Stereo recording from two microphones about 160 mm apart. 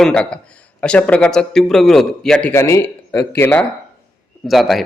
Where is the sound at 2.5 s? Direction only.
15° left (ahead or behind).